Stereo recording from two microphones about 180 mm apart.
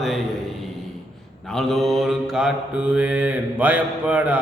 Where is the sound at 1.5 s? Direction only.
Centre (ahead or behind).